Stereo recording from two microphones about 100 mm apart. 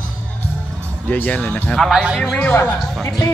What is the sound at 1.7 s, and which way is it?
Speech, centre (ahead or behind).